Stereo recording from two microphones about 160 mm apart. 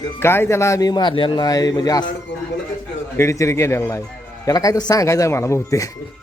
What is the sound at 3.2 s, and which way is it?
A man's voice, 20° left (ahead or behind).